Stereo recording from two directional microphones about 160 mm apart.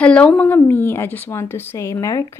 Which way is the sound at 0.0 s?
5° left (ahead or behind).